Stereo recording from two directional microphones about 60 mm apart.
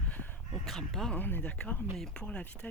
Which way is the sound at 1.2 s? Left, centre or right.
Left.